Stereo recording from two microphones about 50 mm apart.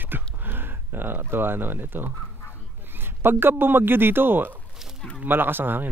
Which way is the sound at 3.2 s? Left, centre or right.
Right.